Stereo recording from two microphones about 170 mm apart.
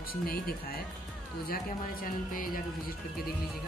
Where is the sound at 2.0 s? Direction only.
55° left (ahead or behind).